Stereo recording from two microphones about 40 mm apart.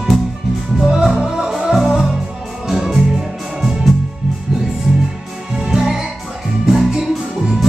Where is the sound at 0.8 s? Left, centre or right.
Centre.